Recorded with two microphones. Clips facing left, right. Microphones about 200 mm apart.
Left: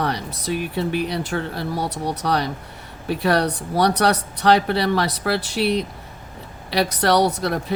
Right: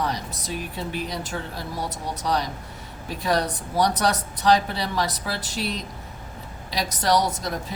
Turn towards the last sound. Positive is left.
turn(degrees=65)  # may be behind; listen again after turning